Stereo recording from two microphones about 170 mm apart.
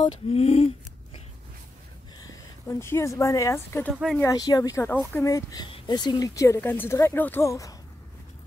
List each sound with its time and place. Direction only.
0.0 s speech: 30° left (ahead or behind)
2.7 s speech: 15° left (ahead or behind)
3.9 s speech: centre (ahead or behind)
4.2 s speech: 20° left (ahead or behind)